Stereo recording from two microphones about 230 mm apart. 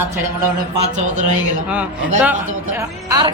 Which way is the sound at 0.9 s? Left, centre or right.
Right.